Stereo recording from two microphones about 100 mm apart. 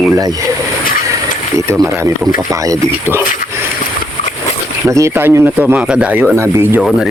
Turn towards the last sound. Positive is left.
turn(degrees=-30)  # may be behind; listen again after turning